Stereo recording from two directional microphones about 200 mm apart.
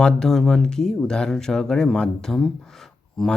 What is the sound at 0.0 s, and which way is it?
Speech, 5° left (ahead or behind).